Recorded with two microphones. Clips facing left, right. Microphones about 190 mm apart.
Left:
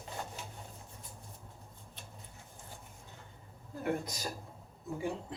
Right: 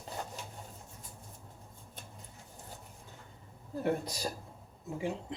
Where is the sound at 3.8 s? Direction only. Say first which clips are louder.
Right 2 dB; 35° right (ahead or behind).